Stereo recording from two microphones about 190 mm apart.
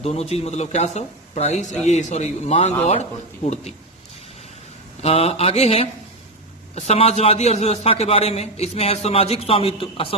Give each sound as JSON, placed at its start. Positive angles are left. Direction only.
{"t": 0.0, "sound": "a man's voice", "side_deg": 35}
{"t": 5.0, "sound": "a man's voice", "side_deg": 30}